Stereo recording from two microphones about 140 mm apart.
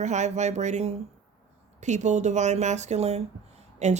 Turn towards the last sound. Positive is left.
turn(degrees=-55)  # may be behind; listen again after turning